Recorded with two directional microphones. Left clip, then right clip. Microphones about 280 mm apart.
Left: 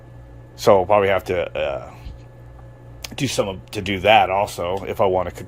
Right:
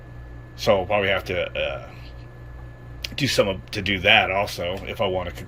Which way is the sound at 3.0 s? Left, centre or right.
Centre.